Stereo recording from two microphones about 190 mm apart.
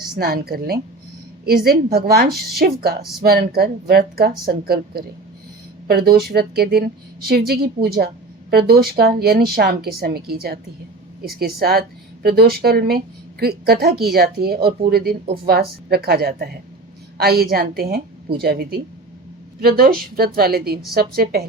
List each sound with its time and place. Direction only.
0.2 s a woman's voice: 55° right (ahead or behind)